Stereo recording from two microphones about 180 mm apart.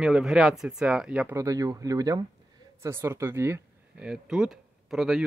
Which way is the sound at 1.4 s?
20° right (ahead or behind).